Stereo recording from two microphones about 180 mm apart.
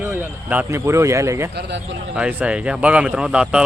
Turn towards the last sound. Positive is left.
turn(degrees=-5)  # may be behind; listen again after turning